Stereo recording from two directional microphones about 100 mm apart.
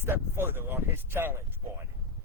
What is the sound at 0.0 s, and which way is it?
Speech, 25° right (ahead or behind).